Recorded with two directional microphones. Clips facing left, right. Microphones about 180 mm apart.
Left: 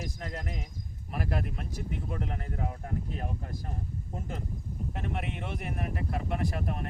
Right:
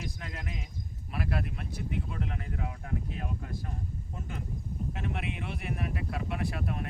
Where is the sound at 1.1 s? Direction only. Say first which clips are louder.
Left 1 dB; 45° left (ahead or behind).